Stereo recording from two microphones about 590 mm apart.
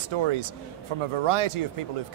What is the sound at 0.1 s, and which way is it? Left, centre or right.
Speech, right.